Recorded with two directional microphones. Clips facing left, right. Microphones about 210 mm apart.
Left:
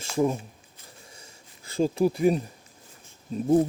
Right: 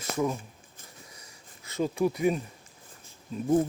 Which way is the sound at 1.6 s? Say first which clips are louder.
Left 4 dB; 30° left (ahead or behind).